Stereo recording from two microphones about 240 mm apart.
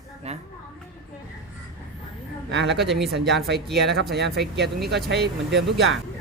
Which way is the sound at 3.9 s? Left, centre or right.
Right.